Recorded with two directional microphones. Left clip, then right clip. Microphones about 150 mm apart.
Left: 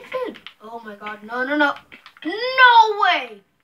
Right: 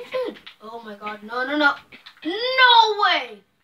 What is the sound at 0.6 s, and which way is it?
Speech, 20° left (ahead or behind).